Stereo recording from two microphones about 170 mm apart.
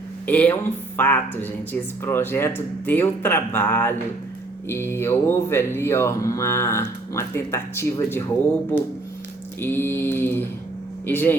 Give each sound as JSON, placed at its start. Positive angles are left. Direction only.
{"t": 0.3, "sound": "speech", "side_deg": 10}
{"t": 9.6, "sound": "speech", "side_deg": 10}